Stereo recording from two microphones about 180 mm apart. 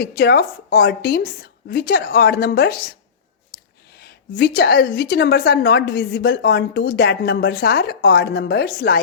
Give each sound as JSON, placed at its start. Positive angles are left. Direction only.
{"t": 0.0, "sound": "a woman's voice", "side_deg": 55}
{"t": 3.9, "sound": "a woman's voice", "side_deg": 60}